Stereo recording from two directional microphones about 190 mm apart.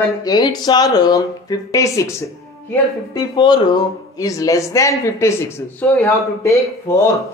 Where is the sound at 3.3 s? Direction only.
25° left (ahead or behind).